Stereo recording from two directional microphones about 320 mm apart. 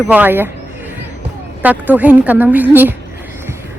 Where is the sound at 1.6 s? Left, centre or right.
Centre.